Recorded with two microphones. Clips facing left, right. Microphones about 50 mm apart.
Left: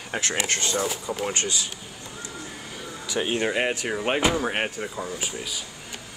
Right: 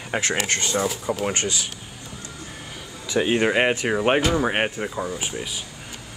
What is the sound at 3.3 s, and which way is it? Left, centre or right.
Speech, right.